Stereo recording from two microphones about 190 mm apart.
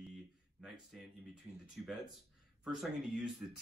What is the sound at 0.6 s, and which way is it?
Speech, centre (ahead or behind).